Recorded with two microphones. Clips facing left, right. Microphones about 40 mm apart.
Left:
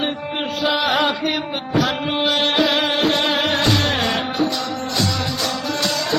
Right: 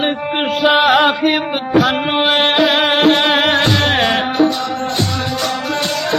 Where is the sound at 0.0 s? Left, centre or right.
Right.